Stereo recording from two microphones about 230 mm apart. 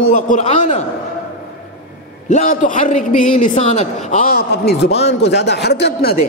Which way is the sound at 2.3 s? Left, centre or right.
Left.